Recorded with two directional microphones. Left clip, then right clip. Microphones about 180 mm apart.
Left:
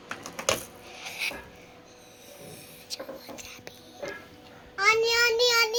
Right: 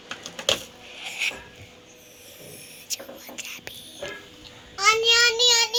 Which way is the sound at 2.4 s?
Centre (ahead or behind).